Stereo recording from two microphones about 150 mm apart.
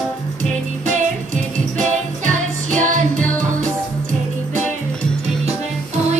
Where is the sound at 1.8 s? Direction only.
55° right (ahead or behind).